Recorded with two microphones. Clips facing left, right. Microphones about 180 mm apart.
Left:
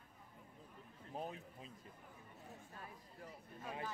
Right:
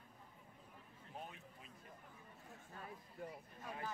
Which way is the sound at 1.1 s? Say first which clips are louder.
Left 6 dB; 35° left (ahead or behind).